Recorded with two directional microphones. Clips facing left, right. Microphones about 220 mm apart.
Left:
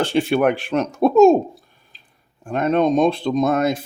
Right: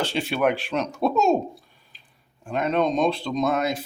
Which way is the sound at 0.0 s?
50° left (ahead or behind).